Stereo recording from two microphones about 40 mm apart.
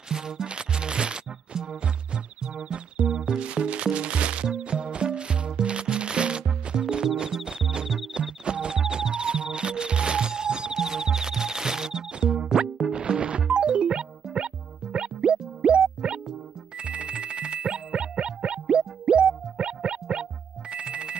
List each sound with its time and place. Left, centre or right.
0.1 s music: centre
7.2 s cricket: centre
8.1 s music: right
16.7 s ringtone: right